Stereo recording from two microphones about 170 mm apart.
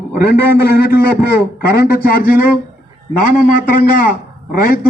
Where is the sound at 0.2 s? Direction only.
65° left (ahead or behind).